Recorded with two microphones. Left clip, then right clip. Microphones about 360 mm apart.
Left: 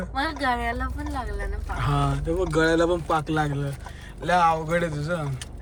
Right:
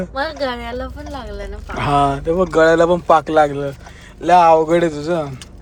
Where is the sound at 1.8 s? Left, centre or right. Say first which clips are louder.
Right 12 dB; centre.